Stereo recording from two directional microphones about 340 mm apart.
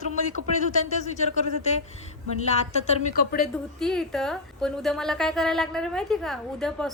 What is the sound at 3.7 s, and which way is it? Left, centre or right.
A woman's voice, centre.